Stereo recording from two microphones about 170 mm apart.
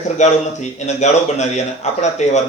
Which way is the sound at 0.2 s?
40° left (ahead or behind).